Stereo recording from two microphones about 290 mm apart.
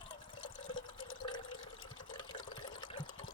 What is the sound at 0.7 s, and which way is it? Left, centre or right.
Water, centre.